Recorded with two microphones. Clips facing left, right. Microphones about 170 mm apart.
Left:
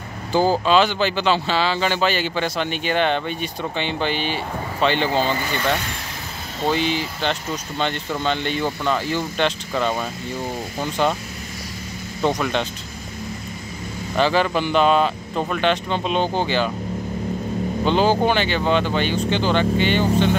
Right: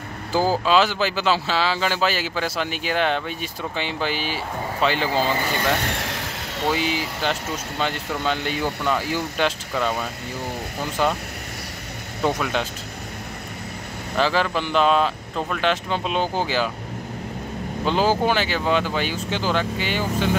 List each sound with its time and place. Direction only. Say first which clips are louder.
0.3 s speech: left 2 dB; 5° right (ahead or behind)
5.9 s vehicle: right 5 dB; 70° right (ahead or behind)
6.7 s speech: left 3 dB; 5° right (ahead or behind)
12.2 s speech: left 2 dB; 5° right (ahead or behind)
14.1 s speech: left 3 dB; centre (ahead or behind)
17.8 s speech: left 2 dB; 5° right (ahead or behind)